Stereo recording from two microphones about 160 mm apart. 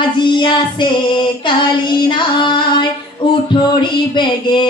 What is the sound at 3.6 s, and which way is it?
Female singing, 30° left (ahead or behind).